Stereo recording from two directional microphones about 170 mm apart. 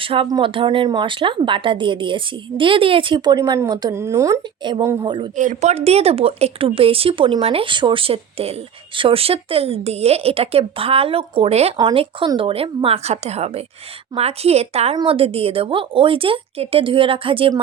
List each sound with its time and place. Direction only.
0.0 s speech: 30° right (ahead or behind)
5.4 s speech: 45° right (ahead or behind)
11.8 s speech: 25° right (ahead or behind)